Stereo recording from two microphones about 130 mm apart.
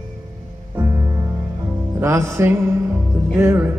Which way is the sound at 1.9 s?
20° right (ahead or behind).